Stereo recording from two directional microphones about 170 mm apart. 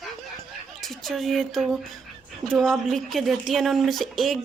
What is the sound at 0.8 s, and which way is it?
A woman's voice, centre (ahead or behind).